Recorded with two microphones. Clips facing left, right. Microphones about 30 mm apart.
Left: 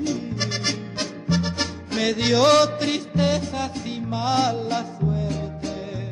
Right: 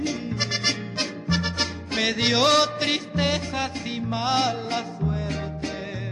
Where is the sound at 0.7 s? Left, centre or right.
Centre.